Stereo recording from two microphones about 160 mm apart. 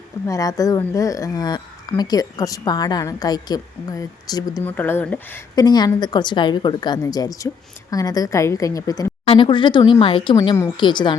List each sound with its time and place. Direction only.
0.3 s a woman's voice: 20° left (ahead or behind)
4.6 s speech: 10° left (ahead or behind)
5.5 s a woman's voice: 25° left (ahead or behind)
9.2 s speech: 35° left (ahead or behind)
10.3 s a woman's voice: 20° left (ahead or behind)